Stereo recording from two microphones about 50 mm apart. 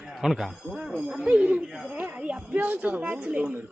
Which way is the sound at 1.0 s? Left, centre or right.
Right.